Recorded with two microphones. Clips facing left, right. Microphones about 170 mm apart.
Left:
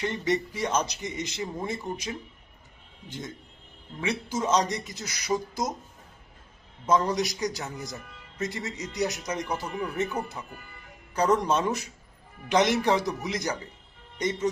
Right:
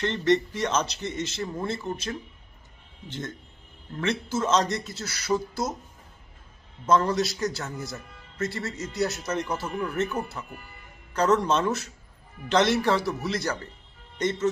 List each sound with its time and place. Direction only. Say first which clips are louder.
0.0 s a man's voice: right 4 dB; 10° left (ahead or behind)
6.8 s a man's voice: right 2 dB; 15° left (ahead or behind)